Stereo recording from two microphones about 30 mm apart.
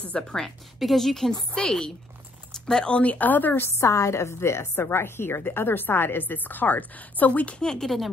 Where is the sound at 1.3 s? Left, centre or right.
Left.